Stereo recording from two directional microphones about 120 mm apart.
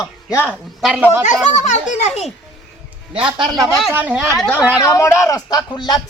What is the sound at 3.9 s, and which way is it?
Speech, 15° right (ahead or behind).